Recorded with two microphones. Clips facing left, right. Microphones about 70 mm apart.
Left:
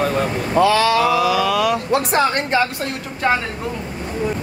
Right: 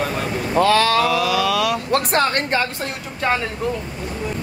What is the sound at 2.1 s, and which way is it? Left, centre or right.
Speech, right.